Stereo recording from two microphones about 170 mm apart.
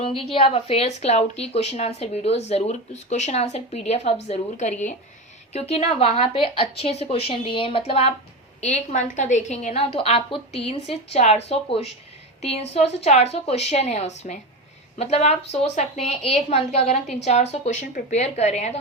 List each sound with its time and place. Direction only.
0.0 s a woman's voice: 35° left (ahead or behind)